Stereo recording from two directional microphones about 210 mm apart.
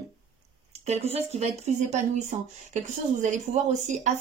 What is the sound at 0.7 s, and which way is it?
Speech, 30° right (ahead or behind).